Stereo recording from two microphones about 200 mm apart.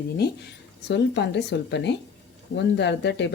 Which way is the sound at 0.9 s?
60° left (ahead or behind).